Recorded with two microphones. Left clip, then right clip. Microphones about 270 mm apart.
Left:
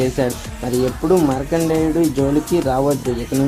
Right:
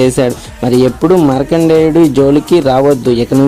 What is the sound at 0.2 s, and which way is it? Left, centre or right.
Speech, right.